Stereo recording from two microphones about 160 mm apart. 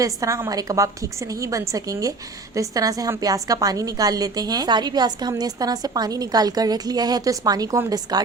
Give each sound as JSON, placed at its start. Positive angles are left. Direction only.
{"t": 0.0, "sound": "a woman's voice", "side_deg": -20}